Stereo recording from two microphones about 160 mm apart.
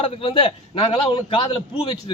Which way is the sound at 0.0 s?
35° left (ahead or behind).